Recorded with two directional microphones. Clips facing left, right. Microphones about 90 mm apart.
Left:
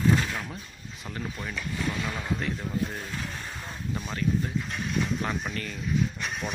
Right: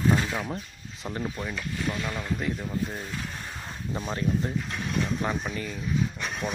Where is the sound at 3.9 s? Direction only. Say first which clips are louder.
Right 2 dB; 25° right (ahead or behind).